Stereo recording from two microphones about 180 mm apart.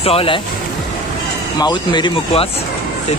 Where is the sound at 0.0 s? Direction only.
30° left (ahead or behind).